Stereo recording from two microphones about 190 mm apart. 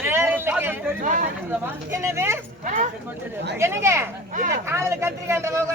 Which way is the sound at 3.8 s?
15° right (ahead or behind).